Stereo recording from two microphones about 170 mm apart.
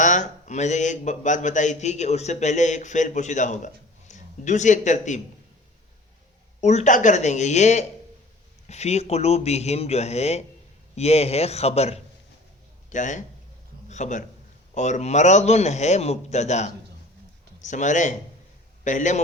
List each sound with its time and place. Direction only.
0.0 s a man's voice: 45° left (ahead or behind)
6.6 s a man's voice: 40° left (ahead or behind)